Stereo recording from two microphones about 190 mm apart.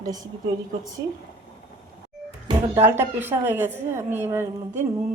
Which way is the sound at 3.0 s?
10° right (ahead or behind).